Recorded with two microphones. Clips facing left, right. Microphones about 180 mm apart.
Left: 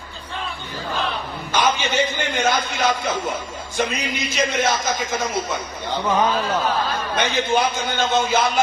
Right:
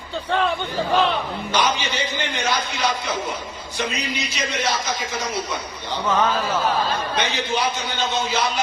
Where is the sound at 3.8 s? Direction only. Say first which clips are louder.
Left 3 dB; 50° left (ahead or behind).